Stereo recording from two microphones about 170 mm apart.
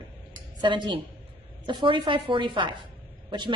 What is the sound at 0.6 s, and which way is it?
A woman's voice, 30° right (ahead or behind).